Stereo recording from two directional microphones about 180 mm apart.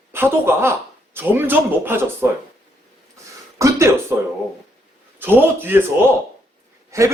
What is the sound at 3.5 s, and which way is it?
Speech, 15° right (ahead or behind).